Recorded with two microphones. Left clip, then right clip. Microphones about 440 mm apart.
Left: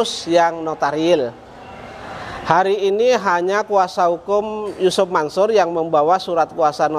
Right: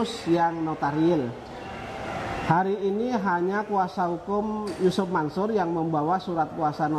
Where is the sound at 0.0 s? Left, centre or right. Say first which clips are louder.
Left 8 dB; left.